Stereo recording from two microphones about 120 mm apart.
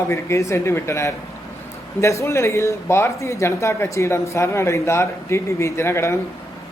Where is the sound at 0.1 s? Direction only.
25° left (ahead or behind).